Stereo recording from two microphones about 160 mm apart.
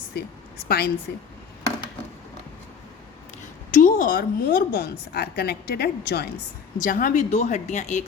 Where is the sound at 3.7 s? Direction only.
55° left (ahead or behind); by 6.3 s 90° left.